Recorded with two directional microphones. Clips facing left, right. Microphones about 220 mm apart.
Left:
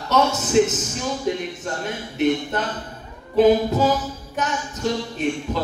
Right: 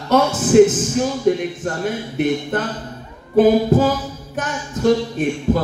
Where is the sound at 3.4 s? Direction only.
50° right (ahead or behind).